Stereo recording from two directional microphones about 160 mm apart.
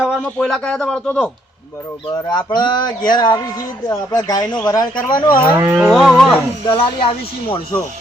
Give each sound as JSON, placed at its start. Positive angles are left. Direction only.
{"t": 0.0, "sound": "speech", "side_deg": 5}
{"t": 2.2, "sound": "speech", "side_deg": 30}
{"t": 5.5, "sound": "speech", "side_deg": -10}
{"t": 5.8, "sound": "speech", "side_deg": 0}
{"t": 6.7, "sound": "speech", "side_deg": 35}